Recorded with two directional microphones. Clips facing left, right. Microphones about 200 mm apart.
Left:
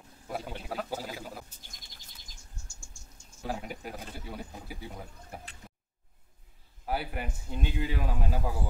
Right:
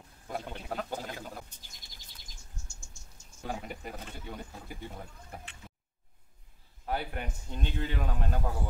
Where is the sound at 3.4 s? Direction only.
5° left (ahead or behind).